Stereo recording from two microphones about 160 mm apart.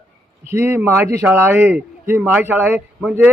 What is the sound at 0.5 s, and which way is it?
A man's voice, 15° right (ahead or behind).